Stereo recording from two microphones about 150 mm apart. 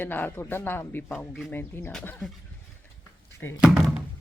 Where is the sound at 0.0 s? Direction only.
15° left (ahead or behind).